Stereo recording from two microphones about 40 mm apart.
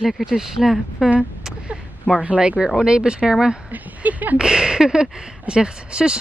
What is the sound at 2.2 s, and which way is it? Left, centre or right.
Speech, right.